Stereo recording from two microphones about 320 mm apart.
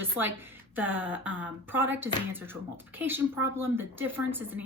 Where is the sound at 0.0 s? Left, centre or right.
Centre.